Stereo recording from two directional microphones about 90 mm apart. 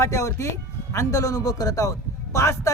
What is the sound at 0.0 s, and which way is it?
Speech, 35° left (ahead or behind).